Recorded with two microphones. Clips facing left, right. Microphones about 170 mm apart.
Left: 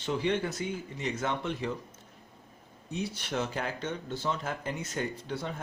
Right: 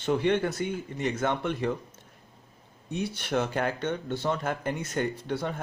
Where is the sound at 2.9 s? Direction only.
60° right (ahead or behind).